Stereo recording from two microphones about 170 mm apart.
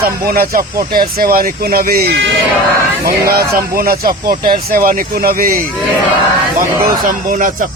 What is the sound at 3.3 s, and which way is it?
Speech, 60° right (ahead or behind).